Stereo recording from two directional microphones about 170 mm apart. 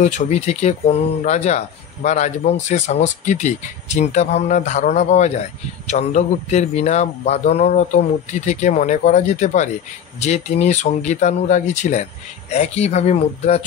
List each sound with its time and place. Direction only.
0.0 s speech: 40° left (ahead or behind)